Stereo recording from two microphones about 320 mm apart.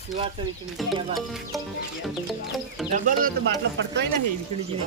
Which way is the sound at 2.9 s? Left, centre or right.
Right.